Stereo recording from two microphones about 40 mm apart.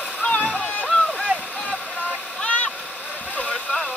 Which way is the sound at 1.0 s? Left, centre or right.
Centre.